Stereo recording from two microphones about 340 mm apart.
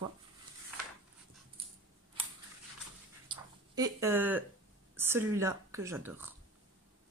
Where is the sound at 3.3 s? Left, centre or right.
Centre.